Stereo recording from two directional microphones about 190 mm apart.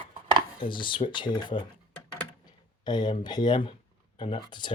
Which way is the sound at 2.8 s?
25° left (ahead or behind).